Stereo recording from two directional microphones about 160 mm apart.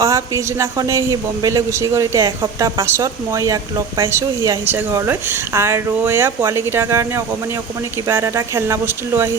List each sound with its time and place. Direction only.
0.0 s a man's voice: 20° right (ahead or behind)